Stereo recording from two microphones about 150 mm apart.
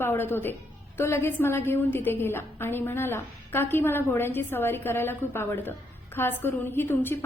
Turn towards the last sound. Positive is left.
turn(degrees=15)  # may be behind; listen again after turning